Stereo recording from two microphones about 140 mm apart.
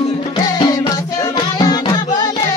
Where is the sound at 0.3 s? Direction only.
30° left (ahead or behind).